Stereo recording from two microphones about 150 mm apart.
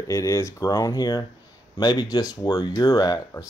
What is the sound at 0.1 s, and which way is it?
Speech, 20° left (ahead or behind).